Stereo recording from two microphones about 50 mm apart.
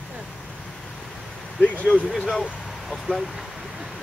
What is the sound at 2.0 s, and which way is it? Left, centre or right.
Speech, centre.